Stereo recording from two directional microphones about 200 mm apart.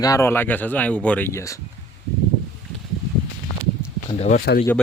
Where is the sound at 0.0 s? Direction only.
15° left (ahead or behind).